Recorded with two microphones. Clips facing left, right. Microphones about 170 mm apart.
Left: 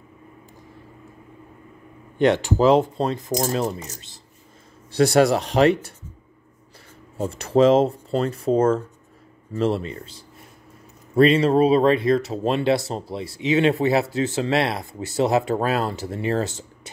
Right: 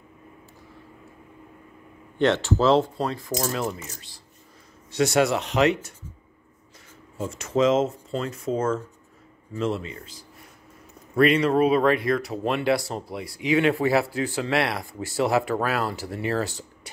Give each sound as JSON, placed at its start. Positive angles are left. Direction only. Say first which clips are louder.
{"t": 2.1, "sound": "speech", "louder": "left 3 dB", "side_deg": 15}
{"t": 3.3, "sound": "speech", "louder": "left 4 dB", "side_deg": 40}
{"t": 3.9, "sound": "speech", "louder": "left 3 dB", "side_deg": 20}
{"t": 4.9, "sound": "speech", "louder": "left 4 dB", "side_deg": 35}
{"t": 7.2, "sound": "speech", "louder": "left 5 dB", "side_deg": 35}